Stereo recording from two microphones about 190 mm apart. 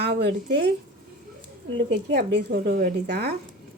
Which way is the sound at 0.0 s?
60° right (ahead or behind).